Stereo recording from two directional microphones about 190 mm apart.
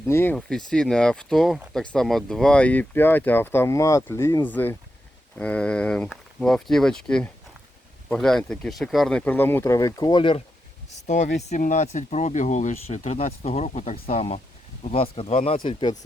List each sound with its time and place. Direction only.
0.1 s speech: 10° left (ahead or behind)
11.0 s speech: 40° left (ahead or behind)